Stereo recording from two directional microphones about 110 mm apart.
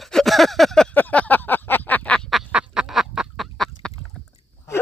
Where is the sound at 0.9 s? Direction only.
15° left (ahead or behind).